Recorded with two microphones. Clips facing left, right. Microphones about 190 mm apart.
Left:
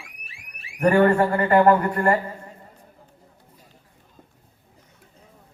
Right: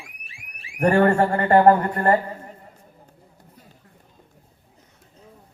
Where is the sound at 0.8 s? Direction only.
35° right (ahead or behind).